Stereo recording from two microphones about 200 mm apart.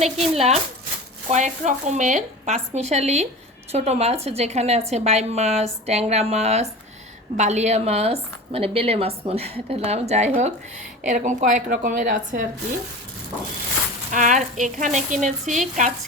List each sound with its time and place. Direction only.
0.0 s a woman's voice: 30° right (ahead or behind)
14.1 s a woman's voice: 40° right (ahead or behind)